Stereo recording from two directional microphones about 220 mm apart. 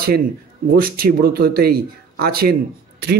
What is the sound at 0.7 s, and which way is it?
A man's voice, 40° right (ahead or behind).